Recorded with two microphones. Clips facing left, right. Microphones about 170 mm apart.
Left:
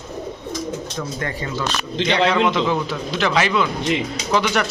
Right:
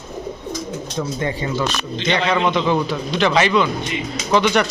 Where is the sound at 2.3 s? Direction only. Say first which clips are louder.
Right 1 dB; centre (ahead or behind).